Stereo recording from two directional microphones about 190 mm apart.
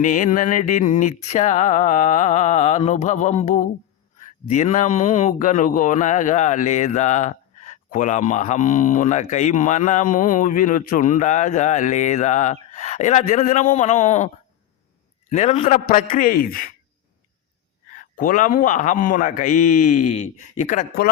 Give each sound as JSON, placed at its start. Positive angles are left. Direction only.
{"t": 0.0, "sound": "a man's voice", "side_deg": 40}
{"t": 15.3, "sound": "a man's voice", "side_deg": 35}
{"t": 17.9, "sound": "a man's voice", "side_deg": 45}